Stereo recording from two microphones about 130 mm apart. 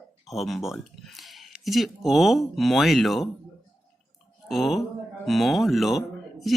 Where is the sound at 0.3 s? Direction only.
Centre (ahead or behind).